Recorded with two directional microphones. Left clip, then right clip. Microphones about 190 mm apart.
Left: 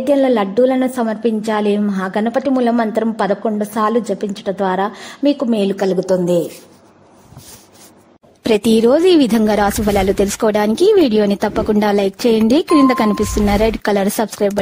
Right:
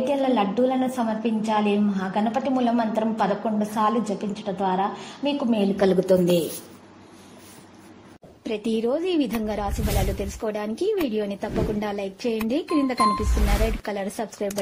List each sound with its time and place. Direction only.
0.0 s a woman's voice: 40° left (ahead or behind)
5.8 s a woman's voice: 15° left (ahead or behind)
8.5 s a woman's voice: 70° left (ahead or behind)